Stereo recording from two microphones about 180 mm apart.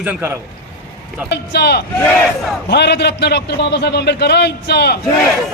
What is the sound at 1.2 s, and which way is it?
A man's voice, 65° left (ahead or behind).